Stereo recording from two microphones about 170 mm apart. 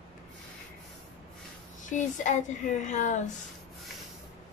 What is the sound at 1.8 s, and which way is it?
Speech, 45° left (ahead or behind).